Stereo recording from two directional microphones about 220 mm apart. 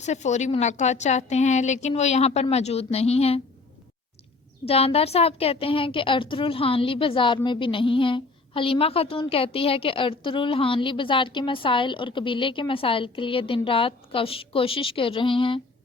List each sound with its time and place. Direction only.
0.0 s a woman's voice: 30° left (ahead or behind)
4.6 s speech: 25° left (ahead or behind)